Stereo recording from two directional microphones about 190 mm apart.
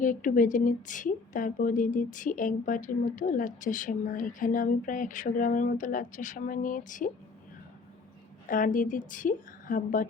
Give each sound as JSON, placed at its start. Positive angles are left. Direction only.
{"t": 0.0, "sound": "a woman's voice", "side_deg": 45}
{"t": 8.4, "sound": "a woman's voice", "side_deg": 45}